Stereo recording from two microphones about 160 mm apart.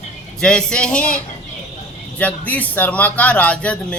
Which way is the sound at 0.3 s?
5° left (ahead or behind).